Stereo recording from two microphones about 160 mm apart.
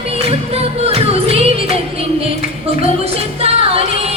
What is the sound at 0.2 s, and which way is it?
Music, 40° right (ahead or behind).